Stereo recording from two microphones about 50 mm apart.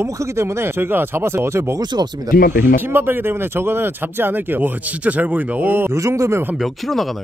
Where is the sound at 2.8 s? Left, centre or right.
Right.